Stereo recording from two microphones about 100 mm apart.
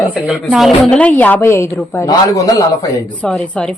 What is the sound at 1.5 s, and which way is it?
A man's voice, 30° left (ahead or behind).